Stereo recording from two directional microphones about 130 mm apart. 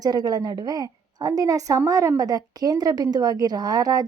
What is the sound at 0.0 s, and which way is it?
A woman's voice, 30° right (ahead or behind).